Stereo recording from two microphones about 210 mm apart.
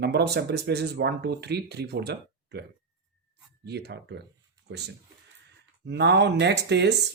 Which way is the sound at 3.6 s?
50° right (ahead or behind).